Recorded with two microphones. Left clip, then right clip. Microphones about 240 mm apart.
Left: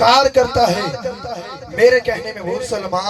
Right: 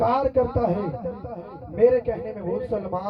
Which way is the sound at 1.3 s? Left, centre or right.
Left.